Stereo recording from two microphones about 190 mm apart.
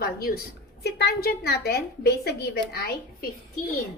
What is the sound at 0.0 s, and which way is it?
A woman's voice, 55° left (ahead or behind).